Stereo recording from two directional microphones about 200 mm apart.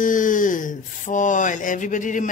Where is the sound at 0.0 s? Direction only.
40° left (ahead or behind).